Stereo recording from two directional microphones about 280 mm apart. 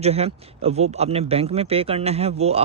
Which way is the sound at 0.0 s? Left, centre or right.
Right.